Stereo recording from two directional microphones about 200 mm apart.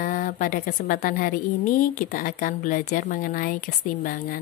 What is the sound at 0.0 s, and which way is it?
Speech, 40° left (ahead or behind).